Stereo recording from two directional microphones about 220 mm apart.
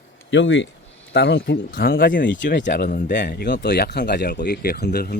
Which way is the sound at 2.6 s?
40° left (ahead or behind).